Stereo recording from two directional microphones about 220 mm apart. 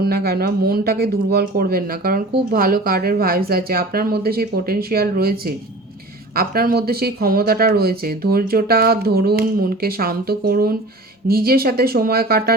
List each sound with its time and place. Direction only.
0.0 s speech: 45° right (ahead or behind)